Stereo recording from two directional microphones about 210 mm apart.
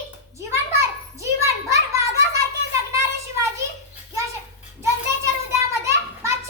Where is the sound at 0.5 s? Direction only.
15° right (ahead or behind).